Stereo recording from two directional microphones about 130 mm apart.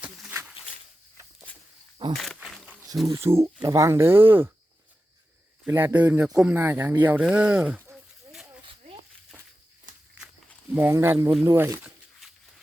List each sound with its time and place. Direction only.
0.3 s a sound: 15° right (ahead or behind)
2.1 s insect: centre (ahead or behind)
3.1 s speech: 20° right (ahead or behind)
5.6 s speech: 20° right (ahead or behind)
8.3 s a sound: 5° right (ahead or behind)
10.7 s speech: 15° right (ahead or behind)